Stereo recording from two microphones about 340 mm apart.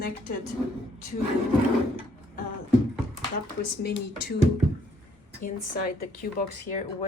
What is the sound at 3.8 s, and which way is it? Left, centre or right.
Speech, left.